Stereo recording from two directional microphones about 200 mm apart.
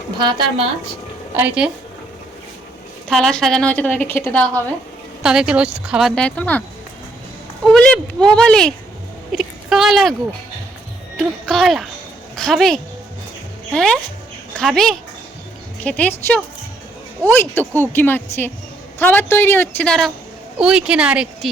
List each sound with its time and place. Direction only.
0.2 s a woman's voice: 20° right (ahead or behind)
1.4 s speech: 5° right (ahead or behind)
3.1 s a woman's voice: centre (ahead or behind)
5.2 s speech: 5° right (ahead or behind)
7.6 s speech: 5° left (ahead or behind)
9.3 s a sound: centre (ahead or behind)
11.2 s a woman's voice: centre (ahead or behind)